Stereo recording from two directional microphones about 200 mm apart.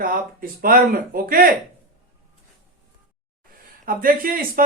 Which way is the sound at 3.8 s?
45° right (ahead or behind).